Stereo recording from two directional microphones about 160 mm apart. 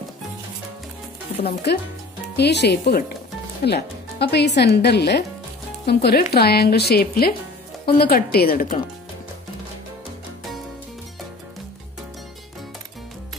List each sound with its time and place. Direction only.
1.4 s speech: 90° left; by 8.7 s 65° left (ahead or behind)